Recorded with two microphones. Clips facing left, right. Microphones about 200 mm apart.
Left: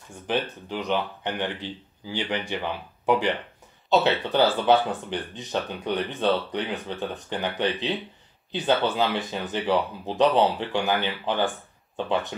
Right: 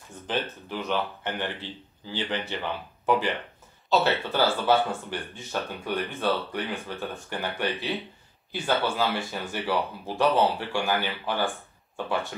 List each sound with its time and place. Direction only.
0.3 s speech: 15° left (ahead or behind)